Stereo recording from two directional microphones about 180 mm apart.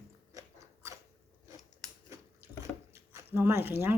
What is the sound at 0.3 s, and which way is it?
Biting, 15° right (ahead or behind).